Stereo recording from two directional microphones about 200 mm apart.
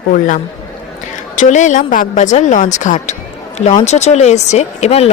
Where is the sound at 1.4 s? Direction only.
35° left (ahead or behind).